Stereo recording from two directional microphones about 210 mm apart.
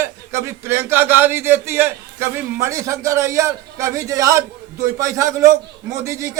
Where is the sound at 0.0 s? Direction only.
10° right (ahead or behind).